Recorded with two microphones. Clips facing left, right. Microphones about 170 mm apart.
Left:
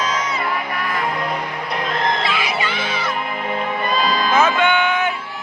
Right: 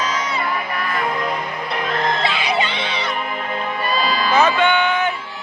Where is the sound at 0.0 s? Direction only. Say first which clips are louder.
Even; 30° right (ahead or behind).